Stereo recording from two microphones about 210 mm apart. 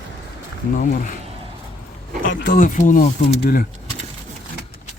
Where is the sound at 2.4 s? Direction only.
40° left (ahead or behind).